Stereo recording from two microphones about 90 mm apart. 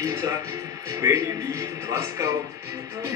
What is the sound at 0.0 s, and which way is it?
Music, 45° right (ahead or behind).